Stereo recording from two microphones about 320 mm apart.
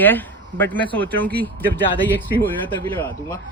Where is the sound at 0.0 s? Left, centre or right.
Centre.